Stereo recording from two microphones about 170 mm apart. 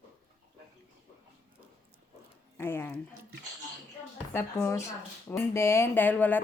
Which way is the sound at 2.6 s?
15° left (ahead or behind).